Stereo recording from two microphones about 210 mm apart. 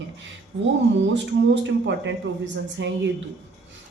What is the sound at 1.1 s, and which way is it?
A woman's voice, 60° right (ahead or behind).